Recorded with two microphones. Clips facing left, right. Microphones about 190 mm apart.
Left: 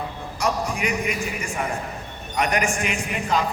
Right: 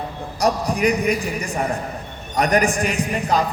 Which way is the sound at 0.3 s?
35° right (ahead or behind).